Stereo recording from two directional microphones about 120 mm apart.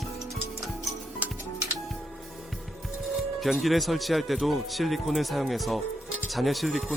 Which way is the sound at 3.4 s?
Centre (ahead or behind).